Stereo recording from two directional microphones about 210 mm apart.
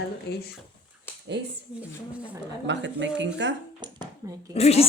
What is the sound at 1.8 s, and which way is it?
Speech, 5° right (ahead or behind).